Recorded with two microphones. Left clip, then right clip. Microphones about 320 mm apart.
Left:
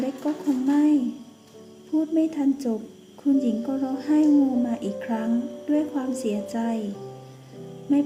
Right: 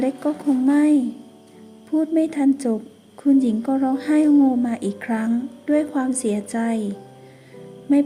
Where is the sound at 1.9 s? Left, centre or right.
Right.